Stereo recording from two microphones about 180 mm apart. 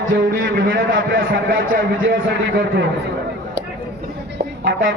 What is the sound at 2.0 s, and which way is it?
Music, 90° right.